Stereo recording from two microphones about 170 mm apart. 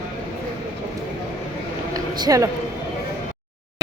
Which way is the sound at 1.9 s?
25° right (ahead or behind).